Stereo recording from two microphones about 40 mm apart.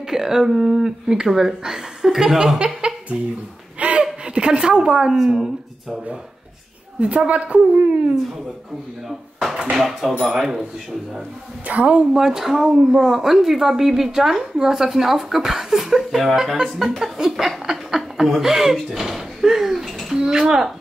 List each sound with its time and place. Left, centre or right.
0.1 s a woman's voice: centre
3.8 s a sound: right
4.3 s a woman's voice: right
7.0 s a woman's voice: right
9.8 s a woman's voice: centre
11.6 s a woman's voice: right
12.1 s a woman's voice: centre
17.0 s chuckle: centre
20.2 s speech: centre